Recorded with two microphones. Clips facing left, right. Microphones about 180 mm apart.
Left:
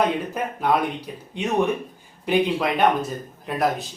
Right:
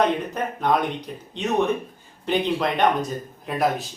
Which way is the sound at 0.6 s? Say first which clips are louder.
Even; 5° left (ahead or behind).